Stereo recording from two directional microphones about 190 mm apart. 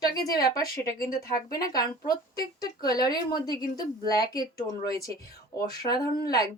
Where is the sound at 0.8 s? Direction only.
50° left (ahead or behind).